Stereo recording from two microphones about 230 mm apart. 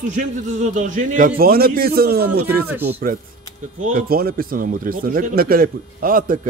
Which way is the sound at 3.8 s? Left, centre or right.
Right.